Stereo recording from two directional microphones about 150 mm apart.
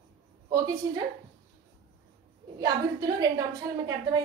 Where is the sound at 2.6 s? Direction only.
25° right (ahead or behind).